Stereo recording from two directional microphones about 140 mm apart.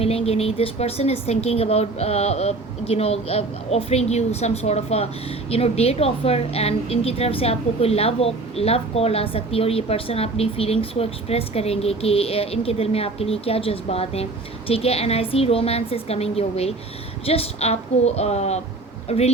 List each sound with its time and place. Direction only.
0.0 s a woman's voice: 45° left (ahead or behind)